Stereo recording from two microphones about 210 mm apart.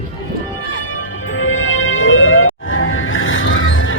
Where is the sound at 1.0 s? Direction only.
70° left (ahead or behind).